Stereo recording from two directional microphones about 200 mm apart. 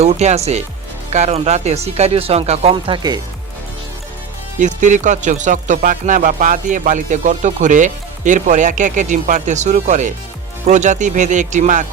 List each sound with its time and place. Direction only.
0.0 s speech: 35° right (ahead or behind)
4.6 s speech: 40° right (ahead or behind)